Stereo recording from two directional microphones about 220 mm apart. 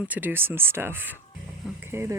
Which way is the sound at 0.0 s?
10° right (ahead or behind).